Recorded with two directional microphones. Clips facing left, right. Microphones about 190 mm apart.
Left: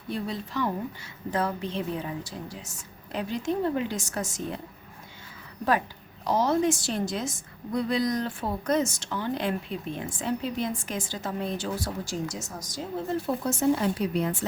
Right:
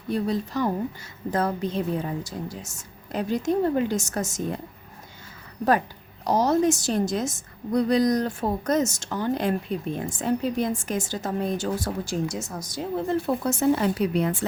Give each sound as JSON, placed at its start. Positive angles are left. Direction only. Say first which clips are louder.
{"t": 0.1, "sound": "a woman's voice", "louder": "right 6 dB", "side_deg": -40}
{"t": 6.2, "sound": "a woman's voice", "louder": "right 3 dB", "side_deg": -40}